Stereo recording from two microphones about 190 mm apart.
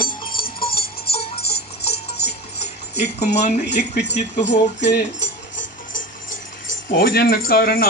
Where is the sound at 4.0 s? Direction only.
60° left (ahead or behind).